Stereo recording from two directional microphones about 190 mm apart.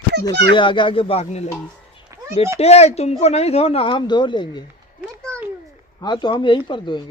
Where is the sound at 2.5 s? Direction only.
35° left (ahead or behind).